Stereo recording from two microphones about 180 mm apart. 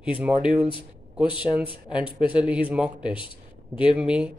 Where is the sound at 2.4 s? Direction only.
5° right (ahead or behind).